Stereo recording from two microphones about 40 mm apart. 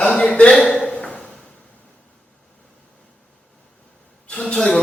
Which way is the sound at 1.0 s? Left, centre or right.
Left.